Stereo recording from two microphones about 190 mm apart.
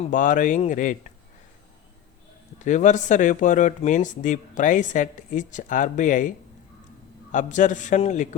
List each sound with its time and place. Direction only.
0.0 s speech: 45° left (ahead or behind)
2.6 s speech: 40° left (ahead or behind)